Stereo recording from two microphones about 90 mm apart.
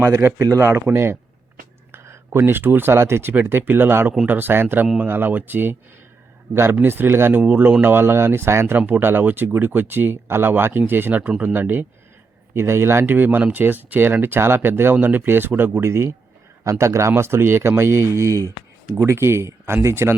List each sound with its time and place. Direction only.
0.0 s speech: 25° right (ahead or behind)